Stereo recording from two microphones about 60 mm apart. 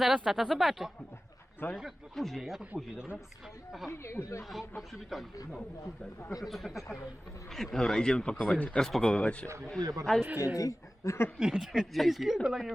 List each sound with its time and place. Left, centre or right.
0.0 s speech: centre
1.6 s a man's voice: left
2.1 s speech: centre
2.4 s speech: centre
3.8 s speech: left
6.4 s a man's voice: centre
8.8 s a man's voice: centre
9.1 s speech: left
9.8 s a man's voice: right
10.2 s speech: right
10.5 s speech: left
11.3 s speech: centre